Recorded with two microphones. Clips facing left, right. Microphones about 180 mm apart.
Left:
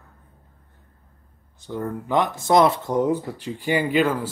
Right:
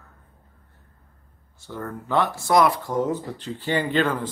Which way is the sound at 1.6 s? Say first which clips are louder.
Left 5 dB; 15° left (ahead or behind).